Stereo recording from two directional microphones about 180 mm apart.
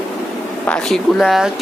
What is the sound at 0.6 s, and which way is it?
Speech, 5° left (ahead or behind).